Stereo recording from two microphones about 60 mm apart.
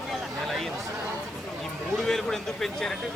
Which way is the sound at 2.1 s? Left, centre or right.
Centre.